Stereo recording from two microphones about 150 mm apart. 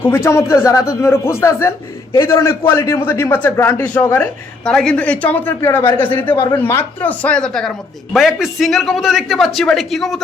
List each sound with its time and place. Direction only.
0.0 s a man's voice: 15° left (ahead or behind)
6.3 s speech: 30° left (ahead or behind)
6.6 s a man's voice: 15° left (ahead or behind)